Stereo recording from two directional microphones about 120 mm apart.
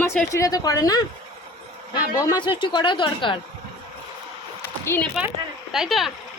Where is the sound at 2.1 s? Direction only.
35° left (ahead or behind).